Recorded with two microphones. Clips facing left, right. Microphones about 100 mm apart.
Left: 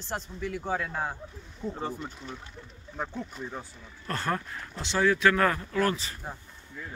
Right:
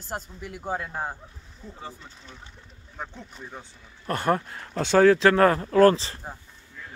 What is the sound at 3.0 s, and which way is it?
Speech, 5° left (ahead or behind).